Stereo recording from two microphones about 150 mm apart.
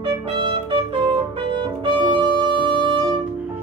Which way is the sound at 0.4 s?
30° right (ahead or behind).